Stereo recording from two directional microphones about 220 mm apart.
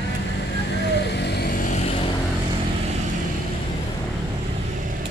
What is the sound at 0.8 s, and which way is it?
Vehicle, 50° left (ahead or behind).